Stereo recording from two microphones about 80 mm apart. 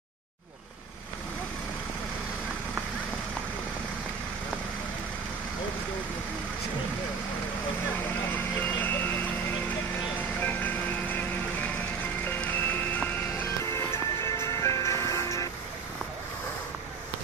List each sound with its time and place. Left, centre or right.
8.3 s a sound: left
10.4 s music: left
12.4 s music: left